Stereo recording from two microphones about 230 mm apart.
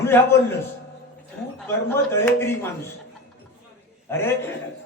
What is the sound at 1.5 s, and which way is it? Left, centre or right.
Speech, centre.